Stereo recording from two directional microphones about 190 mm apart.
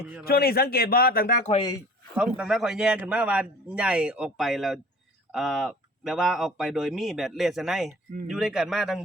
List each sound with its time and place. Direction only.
0.3 s speech: 55° left (ahead or behind)
2.1 s speech: 5° right (ahead or behind)